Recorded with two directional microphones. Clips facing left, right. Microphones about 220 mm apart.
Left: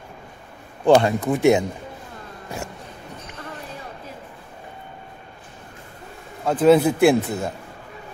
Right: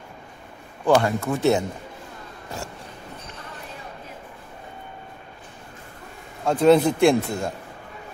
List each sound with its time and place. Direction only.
0.8 s speech: 25° left (ahead or behind)
6.4 s a man's voice: 5° left (ahead or behind)